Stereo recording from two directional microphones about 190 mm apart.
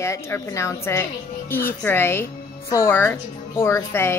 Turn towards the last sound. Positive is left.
turn(degrees=15)  # may be behind; listen again after turning